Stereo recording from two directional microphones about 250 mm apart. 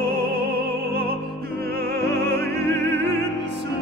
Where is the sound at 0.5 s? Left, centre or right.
Right.